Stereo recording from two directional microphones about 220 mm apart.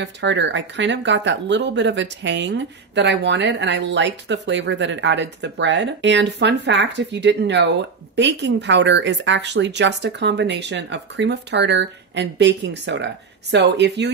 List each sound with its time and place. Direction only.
0.0 s speech: 55° right (ahead or behind)